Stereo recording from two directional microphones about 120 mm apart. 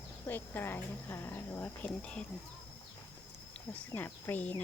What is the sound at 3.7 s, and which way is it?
Speech, 15° left (ahead or behind).